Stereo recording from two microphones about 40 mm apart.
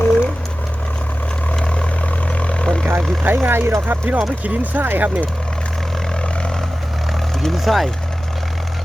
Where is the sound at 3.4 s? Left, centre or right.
Right.